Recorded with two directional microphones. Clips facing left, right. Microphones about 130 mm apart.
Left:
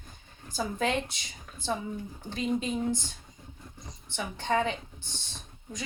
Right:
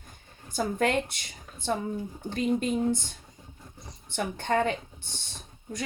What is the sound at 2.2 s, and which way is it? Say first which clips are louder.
Speech: right 3 dB; 50° right (ahead or behind).